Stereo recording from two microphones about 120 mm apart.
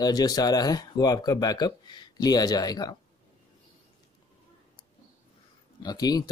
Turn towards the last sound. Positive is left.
turn(degrees=35)  # may be behind; listen again after turning